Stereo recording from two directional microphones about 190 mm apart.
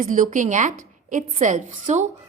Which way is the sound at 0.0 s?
45° right (ahead or behind).